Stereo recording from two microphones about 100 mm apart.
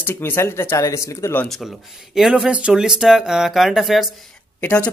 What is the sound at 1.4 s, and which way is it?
Speech, centre (ahead or behind).